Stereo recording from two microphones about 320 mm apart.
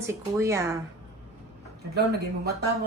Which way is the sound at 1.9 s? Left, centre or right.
Right.